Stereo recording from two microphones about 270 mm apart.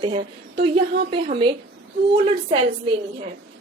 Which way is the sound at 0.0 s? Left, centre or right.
Centre.